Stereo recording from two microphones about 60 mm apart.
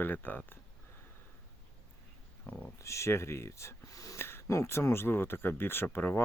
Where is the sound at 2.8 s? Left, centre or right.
Left.